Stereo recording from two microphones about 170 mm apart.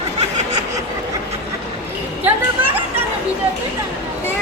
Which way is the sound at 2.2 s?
10° right (ahead or behind).